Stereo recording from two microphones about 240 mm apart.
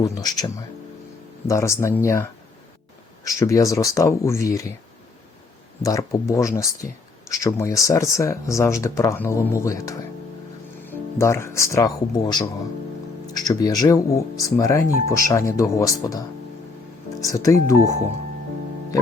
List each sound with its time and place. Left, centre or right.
0.0 s speech: centre
5.8 s speech: centre
17.2 s speech: centre